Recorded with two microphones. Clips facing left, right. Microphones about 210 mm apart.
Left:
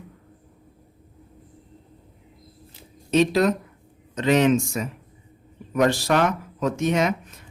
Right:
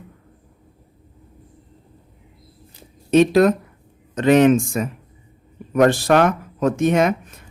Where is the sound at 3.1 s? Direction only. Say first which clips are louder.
Right 5 dB; 55° right (ahead or behind).